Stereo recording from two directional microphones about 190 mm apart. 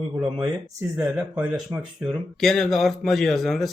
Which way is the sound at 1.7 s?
15° right (ahead or behind).